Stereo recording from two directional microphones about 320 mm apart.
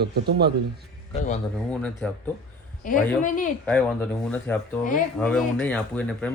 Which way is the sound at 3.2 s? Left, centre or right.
Left.